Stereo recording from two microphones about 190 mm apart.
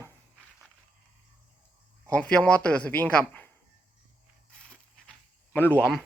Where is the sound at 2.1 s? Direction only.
5° left (ahead or behind).